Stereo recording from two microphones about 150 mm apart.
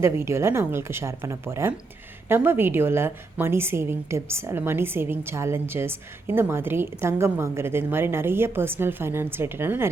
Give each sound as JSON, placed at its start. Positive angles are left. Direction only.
{"t": 0.0, "sound": "a woman's voice", "side_deg": -20}